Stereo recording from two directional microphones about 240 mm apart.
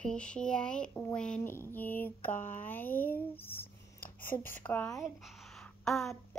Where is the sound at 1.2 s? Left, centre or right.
Centre.